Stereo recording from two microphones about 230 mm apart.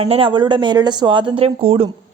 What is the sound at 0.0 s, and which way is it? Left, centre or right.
A woman's voice, right.